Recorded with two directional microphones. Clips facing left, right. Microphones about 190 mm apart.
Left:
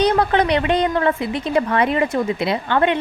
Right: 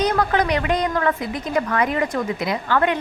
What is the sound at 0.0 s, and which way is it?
A woman's voice, 30° left (ahead or behind).